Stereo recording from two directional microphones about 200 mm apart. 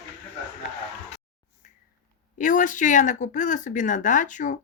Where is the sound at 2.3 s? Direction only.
40° left (ahead or behind).